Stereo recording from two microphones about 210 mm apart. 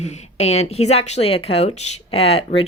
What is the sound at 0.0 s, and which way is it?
Speech, 30° left (ahead or behind).